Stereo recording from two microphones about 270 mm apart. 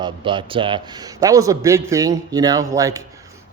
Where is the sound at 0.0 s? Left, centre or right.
Centre.